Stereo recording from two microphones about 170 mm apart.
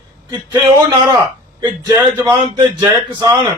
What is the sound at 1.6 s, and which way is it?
Speech, 20° right (ahead or behind).